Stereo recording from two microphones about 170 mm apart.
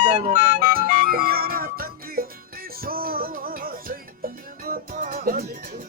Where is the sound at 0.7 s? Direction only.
60° right (ahead or behind).